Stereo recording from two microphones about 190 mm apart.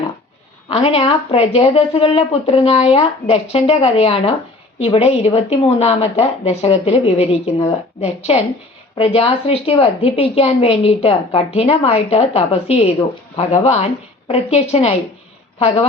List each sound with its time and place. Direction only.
0.7 s a woman's voice: 35° left (ahead or behind)